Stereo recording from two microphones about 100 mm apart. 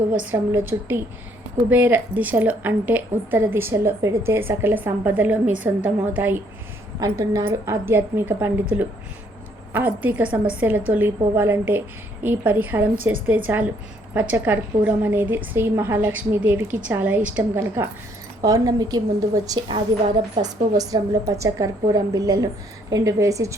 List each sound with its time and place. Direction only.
0.1 s a woman's voice: 15° right (ahead or behind)
7.0 s a woman's voice: 35° right (ahead or behind)
7.4 s a woman's voice: 25° right (ahead or behind)
9.7 s a woman's voice: 20° right (ahead or behind)
18.4 s a woman's voice: 35° right (ahead or behind)
19.5 s a woman's voice: 55° right (ahead or behind); by 23.6 s 30° right (ahead or behind)